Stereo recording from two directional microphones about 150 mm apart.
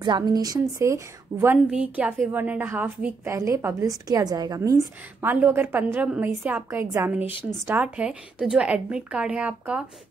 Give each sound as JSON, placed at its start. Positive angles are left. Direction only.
{"t": 0.0, "sound": "a woman's voice", "side_deg": -30}
{"t": 1.7, "sound": "a woman's voice", "side_deg": -10}